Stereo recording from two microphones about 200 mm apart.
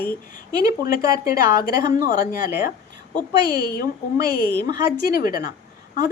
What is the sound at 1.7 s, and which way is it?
Speech, 20° right (ahead or behind).